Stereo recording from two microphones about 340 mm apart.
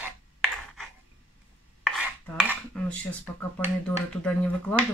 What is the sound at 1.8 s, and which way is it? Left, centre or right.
Dishes, centre.